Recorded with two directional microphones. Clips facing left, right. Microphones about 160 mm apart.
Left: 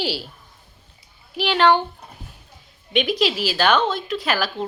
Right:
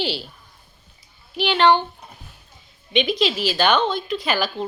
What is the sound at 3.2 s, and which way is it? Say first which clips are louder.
A woman's voice: even; 5° left (ahead or behind).